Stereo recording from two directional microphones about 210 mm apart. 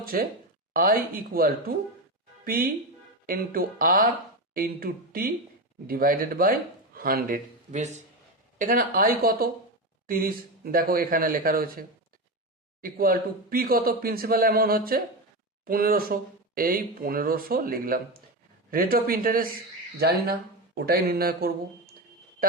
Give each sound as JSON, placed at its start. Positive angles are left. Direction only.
{"t": 0.0, "sound": "speech", "side_deg": -45}